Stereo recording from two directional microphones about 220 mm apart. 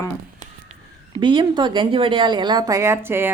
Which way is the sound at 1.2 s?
20° right (ahead or behind).